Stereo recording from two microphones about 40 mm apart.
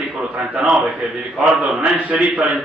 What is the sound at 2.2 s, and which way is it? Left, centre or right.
Speech, right.